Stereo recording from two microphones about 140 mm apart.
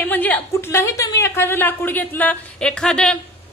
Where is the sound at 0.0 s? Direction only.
15° left (ahead or behind).